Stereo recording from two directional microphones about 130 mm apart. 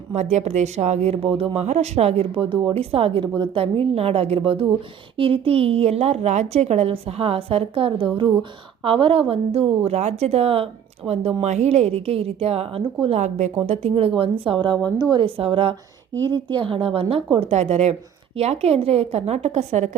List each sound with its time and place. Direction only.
0.1 s a woman's voice: 60° right (ahead or behind); by 13.1 s 45° right (ahead or behind)
13.1 s speech: 60° right (ahead or behind)
13.6 s a woman's voice: 50° right (ahead or behind)
17.5 s a woman's voice: 55° right (ahead or behind)